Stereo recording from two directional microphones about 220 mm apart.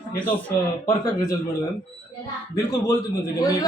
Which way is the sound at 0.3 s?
10° left (ahead or behind).